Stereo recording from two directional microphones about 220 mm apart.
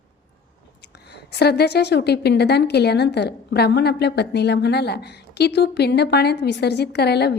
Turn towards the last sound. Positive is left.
turn(degrees=50)  # may be behind; listen again after turning